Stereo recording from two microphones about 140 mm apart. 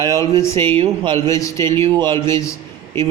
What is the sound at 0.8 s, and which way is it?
Speech, 35° right (ahead or behind).